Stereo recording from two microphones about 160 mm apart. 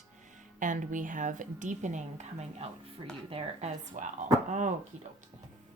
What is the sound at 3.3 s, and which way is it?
Speech, 45° right (ahead or behind).